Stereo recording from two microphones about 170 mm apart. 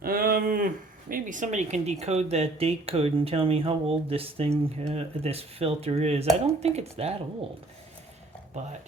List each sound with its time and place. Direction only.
0.0 s a sound: 60° right (ahead or behind)
1.1 s speech: 50° right (ahead or behind)
8.6 s speech: 40° right (ahead or behind)